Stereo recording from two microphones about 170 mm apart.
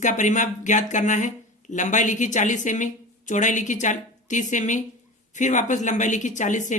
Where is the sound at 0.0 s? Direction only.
45° left (ahead or behind).